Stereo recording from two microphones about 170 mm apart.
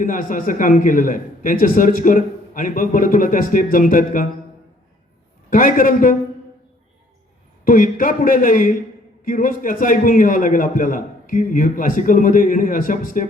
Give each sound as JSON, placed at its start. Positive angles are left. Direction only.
{"t": 0.0, "sound": "a man's voice", "side_deg": 55}
{"t": 5.5, "sound": "a man's voice", "side_deg": 55}
{"t": 7.6, "sound": "a man's voice", "side_deg": 55}